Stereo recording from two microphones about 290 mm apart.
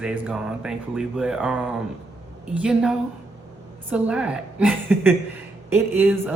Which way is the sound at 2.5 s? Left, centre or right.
Centre.